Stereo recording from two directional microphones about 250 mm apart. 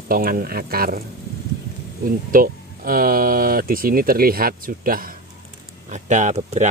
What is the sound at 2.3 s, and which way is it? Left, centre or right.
Speech, right.